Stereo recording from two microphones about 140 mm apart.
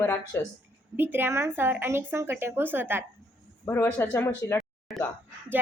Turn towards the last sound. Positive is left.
turn(degrees=0)  # may be behind; listen again after turning